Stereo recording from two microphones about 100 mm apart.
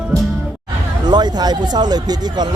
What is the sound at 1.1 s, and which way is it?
Speech, 45° right (ahead or behind).